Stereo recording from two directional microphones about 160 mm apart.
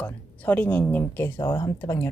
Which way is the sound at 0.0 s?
10° left (ahead or behind).